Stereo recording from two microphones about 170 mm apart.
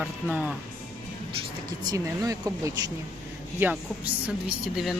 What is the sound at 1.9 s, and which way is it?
Speech, 20° right (ahead or behind).